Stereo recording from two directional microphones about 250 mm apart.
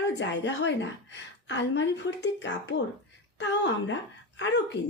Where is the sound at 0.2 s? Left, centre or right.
Left.